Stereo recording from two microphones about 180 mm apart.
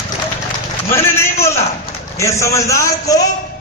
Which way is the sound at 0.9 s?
15° left (ahead or behind).